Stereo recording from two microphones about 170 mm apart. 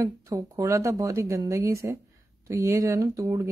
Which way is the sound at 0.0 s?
20° right (ahead or behind).